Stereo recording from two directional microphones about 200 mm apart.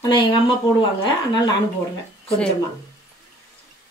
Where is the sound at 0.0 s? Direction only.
25° left (ahead or behind).